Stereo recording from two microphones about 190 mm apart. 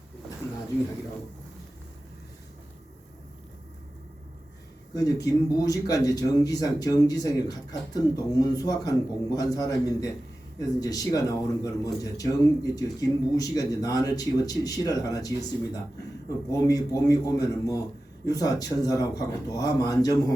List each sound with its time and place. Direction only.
4.9 s a man's voice: 20° left (ahead or behind)